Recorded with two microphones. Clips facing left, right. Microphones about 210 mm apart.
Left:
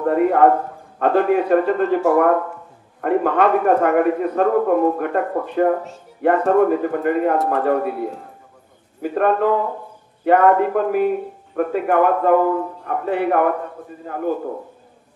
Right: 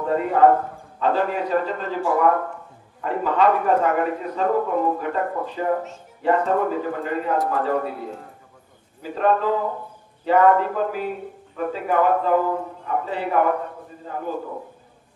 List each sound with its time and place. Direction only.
0.0 s a man's voice: 60° left (ahead or behind)